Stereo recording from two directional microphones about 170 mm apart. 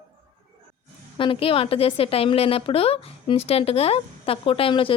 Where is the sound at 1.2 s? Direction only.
30° left (ahead or behind).